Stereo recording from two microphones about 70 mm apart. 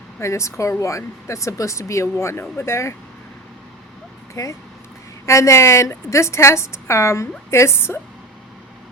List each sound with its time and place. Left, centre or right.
0.2 s speech: left
4.4 s a woman's voice: left